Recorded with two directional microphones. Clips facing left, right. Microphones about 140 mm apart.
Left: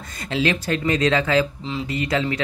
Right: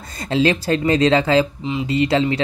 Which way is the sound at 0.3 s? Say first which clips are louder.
Right 5 dB; 30° right (ahead or behind).